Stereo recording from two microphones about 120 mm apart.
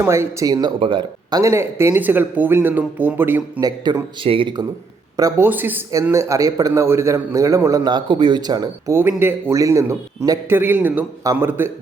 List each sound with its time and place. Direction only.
0.0 s a man's voice: 25° right (ahead or behind); by 1.4 s 40° right (ahead or behind)
1.4 s speech: 25° right (ahead or behind)
3.6 s speech: 35° right (ahead or behind)
4.2 s speech: 45° right (ahead or behind)
5.4 s a man's voice: 15° right (ahead or behind)
7.9 s speech: 40° right (ahead or behind)
9.0 s a man's voice: 20° right (ahead or behind)